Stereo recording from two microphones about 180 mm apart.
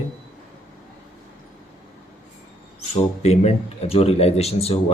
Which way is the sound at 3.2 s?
35° left (ahead or behind).